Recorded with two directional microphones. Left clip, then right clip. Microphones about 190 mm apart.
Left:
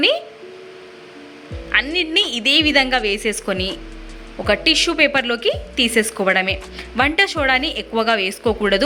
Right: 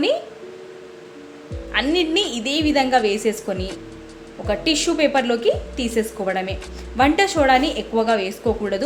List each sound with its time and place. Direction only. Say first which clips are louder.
1.7 s speech: left 2 dB; 5° left (ahead or behind)